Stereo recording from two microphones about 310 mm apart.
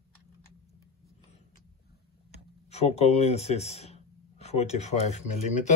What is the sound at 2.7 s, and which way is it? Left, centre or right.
Speech, left.